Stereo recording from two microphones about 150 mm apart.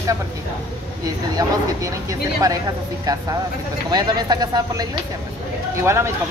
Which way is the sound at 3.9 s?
25° right (ahead or behind).